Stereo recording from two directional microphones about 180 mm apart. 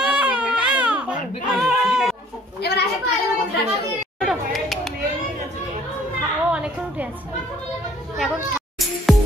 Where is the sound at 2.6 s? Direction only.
65° left (ahead or behind).